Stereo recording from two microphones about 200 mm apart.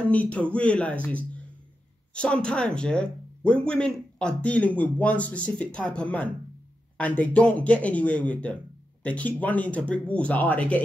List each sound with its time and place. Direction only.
0.1 s speech: 5° left (ahead or behind)